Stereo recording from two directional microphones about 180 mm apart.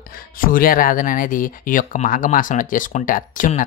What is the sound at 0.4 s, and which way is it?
Speech, 50° left (ahead or behind).